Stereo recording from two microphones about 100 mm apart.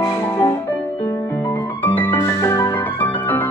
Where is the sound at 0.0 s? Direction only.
35° left (ahead or behind).